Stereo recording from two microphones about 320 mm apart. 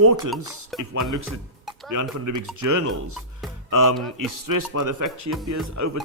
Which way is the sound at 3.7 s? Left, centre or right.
Right.